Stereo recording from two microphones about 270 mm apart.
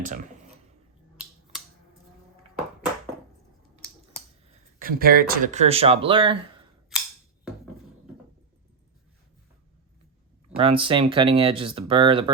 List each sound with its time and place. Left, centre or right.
4.8 s speech: right
10.6 s speech: centre